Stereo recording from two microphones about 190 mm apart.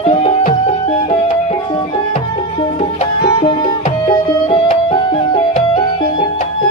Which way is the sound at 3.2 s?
25° left (ahead or behind).